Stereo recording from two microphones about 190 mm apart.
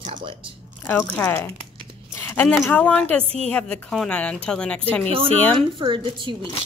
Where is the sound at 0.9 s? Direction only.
10° left (ahead or behind).